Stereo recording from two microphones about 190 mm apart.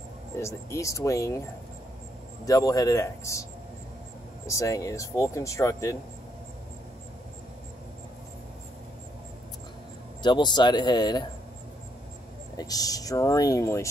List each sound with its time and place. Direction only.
0.4 s speech: 15° left (ahead or behind)
2.4 s speech: 20° left (ahead or behind)
4.5 s speech: 15° left (ahead or behind)
10.2 s speech: 25° left (ahead or behind)
12.5 s speech: 20° left (ahead or behind)